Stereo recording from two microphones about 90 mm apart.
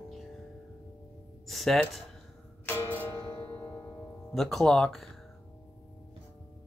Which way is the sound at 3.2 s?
60° left (ahead or behind).